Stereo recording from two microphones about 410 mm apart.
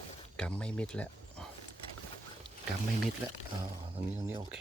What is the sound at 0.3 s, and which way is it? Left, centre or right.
Speech, centre.